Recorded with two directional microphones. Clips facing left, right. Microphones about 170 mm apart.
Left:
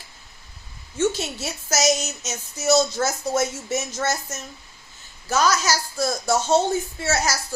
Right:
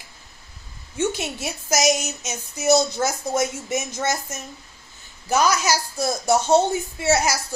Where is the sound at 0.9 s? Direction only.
15° right (ahead or behind).